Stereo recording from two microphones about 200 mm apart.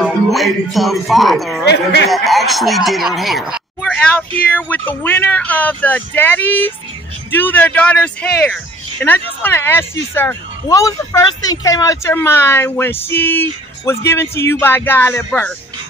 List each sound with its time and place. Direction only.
0.0 s a man's voice: centre (ahead or behind)
1.7 s speech: 55° left (ahead or behind)
2.0 s speech: centre (ahead or behind)